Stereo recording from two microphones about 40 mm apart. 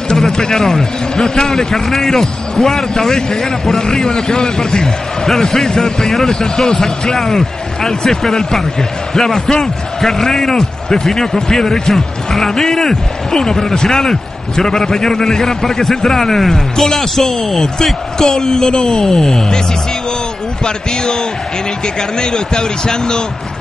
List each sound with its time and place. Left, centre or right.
0.1 s speech: centre
20.6 s speech: centre